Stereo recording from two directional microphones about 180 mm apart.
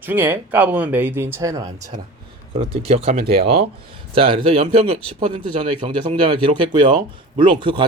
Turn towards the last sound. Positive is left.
turn(degrees=-25)  # may be behind; listen again after turning